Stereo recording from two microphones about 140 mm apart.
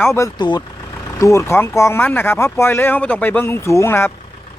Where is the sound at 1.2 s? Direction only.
20° left (ahead or behind).